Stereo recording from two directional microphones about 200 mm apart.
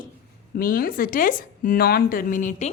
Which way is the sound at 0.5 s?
45° left (ahead or behind).